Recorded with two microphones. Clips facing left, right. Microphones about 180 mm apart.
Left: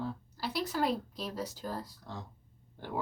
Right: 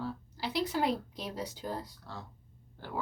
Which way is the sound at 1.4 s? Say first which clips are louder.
Right 1 dB; 20° right (ahead or behind).